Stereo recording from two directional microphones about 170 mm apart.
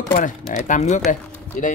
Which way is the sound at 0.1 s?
50° left (ahead or behind).